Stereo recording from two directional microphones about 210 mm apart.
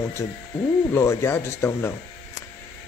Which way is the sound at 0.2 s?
15° left (ahead or behind).